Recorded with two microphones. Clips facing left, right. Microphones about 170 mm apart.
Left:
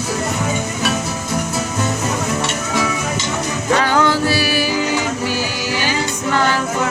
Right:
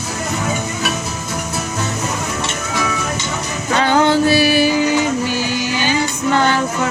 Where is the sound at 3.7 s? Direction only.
25° right (ahead or behind).